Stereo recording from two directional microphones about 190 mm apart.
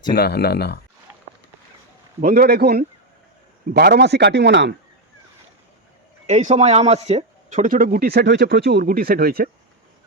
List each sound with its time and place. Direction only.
0.1 s speech: 55° left (ahead or behind)
2.2 s a man's voice: 50° right (ahead or behind)
6.2 s speech: 35° right (ahead or behind)